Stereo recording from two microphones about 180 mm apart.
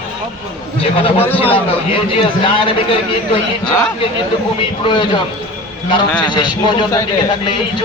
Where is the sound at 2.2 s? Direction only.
30° left (ahead or behind).